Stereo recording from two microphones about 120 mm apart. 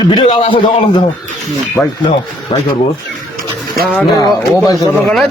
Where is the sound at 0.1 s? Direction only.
40° left (ahead or behind).